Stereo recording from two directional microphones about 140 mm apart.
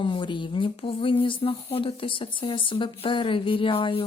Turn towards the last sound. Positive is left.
turn(degrees=40)  # may be behind; listen again after turning